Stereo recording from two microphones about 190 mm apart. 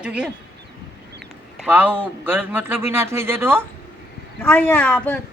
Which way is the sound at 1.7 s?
10° right (ahead or behind).